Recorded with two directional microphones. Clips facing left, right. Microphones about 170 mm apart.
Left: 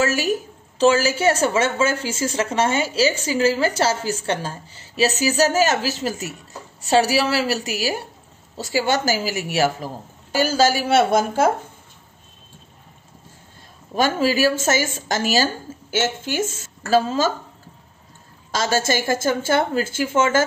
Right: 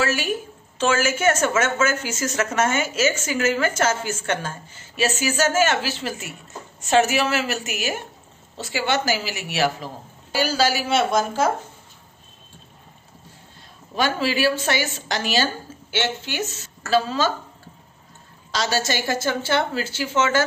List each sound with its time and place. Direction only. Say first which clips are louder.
0.0 s a woman's voice: left 3 dB; 40° left (ahead or behind)
13.9 s a woman's voice: left 3 dB; 45° left (ahead or behind)
18.5 s a woman's voice: left 3 dB; 45° left (ahead or behind)